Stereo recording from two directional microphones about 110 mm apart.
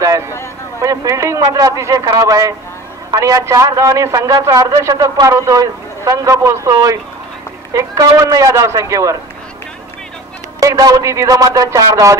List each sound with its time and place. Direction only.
0.8 s a man's voice: 30° right (ahead or behind)
10.6 s a man's voice: 35° right (ahead or behind)